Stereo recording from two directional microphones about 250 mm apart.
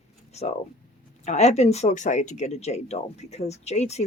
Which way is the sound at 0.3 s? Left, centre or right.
Left.